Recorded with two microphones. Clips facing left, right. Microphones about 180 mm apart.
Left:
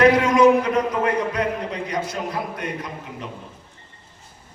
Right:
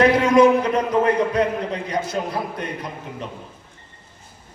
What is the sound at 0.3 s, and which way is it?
A man's voice, 30° right (ahead or behind).